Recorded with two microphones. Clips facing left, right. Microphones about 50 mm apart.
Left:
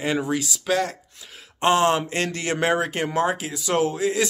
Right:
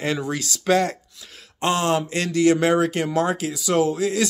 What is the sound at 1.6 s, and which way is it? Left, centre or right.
Speech, left.